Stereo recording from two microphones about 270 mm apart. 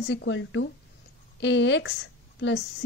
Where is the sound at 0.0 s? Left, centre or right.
Left.